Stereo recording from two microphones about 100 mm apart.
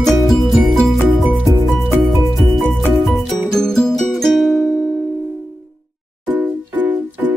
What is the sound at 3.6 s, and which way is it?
Music, 5° left (ahead or behind).